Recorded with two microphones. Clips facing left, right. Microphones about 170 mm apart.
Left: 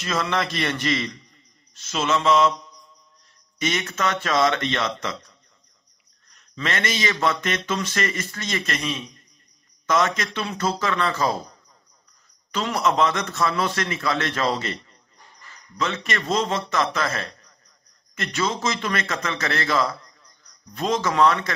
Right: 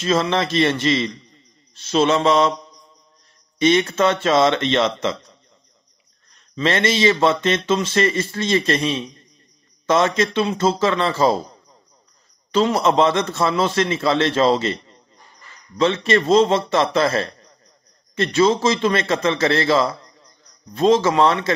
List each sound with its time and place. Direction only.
0.0 s a man's voice: 25° right (ahead or behind)
3.5 s speech: 30° right (ahead or behind)
6.5 s speech: 30° right (ahead or behind)
12.4 s speech: 25° right (ahead or behind)